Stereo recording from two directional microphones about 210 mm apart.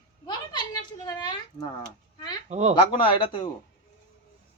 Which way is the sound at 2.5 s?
30° right (ahead or behind).